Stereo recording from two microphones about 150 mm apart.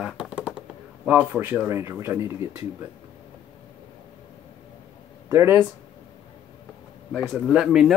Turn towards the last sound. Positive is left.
turn(degrees=-5)  # may be behind; listen again after turning